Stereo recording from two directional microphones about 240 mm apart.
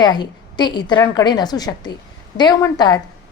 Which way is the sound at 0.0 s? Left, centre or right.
Centre.